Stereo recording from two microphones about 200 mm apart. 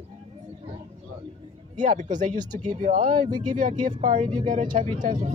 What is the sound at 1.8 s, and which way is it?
Speech, 40° right (ahead or behind).